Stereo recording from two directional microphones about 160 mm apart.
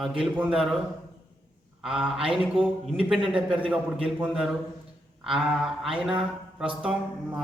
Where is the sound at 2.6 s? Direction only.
35° right (ahead or behind).